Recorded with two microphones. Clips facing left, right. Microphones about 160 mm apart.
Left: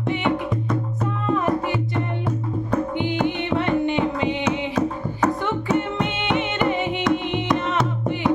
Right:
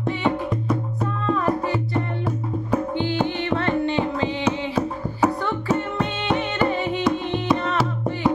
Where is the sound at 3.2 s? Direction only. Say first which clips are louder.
Left 1 dB; 15° left (ahead or behind).